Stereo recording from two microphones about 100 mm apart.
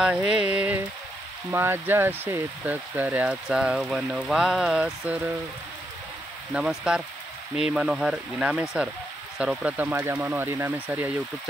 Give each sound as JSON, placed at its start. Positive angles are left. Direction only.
{"t": 0.0, "sound": "speech", "side_deg": -10}
{"t": 5.0, "sound": "speech", "side_deg": -15}
{"t": 6.5, "sound": "speech", "side_deg": -10}